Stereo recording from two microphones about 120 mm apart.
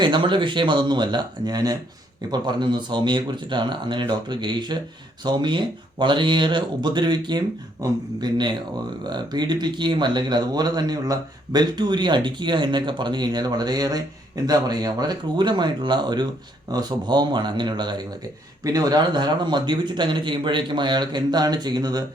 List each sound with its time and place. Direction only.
0.0 s speech: 40° right (ahead or behind)